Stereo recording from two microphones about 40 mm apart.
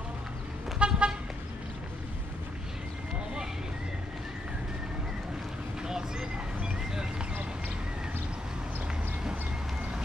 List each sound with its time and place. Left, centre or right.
0.7 s toot: right
5.8 s vehicle: centre